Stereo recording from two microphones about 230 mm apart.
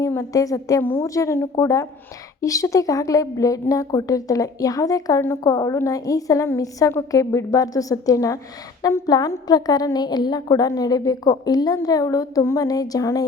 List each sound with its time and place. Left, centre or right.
0.0 s a woman's voice: centre